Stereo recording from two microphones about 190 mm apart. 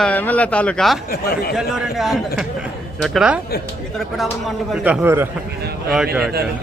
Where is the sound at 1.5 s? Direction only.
Centre (ahead or behind).